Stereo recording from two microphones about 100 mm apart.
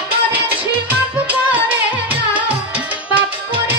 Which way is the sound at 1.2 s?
15° right (ahead or behind).